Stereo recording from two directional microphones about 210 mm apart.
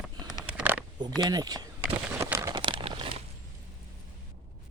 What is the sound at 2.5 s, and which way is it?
Crumpling, 25° right (ahead or behind).